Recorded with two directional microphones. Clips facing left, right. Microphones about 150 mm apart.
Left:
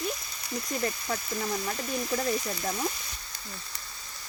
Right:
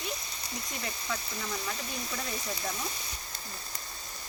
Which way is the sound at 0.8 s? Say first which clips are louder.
Left 5 dB; 40° left (ahead or behind).